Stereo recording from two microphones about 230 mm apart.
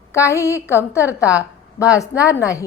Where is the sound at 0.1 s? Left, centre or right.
Centre.